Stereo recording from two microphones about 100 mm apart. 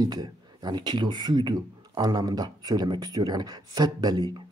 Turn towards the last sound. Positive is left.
turn(degrees=-45)  # may be behind; listen again after turning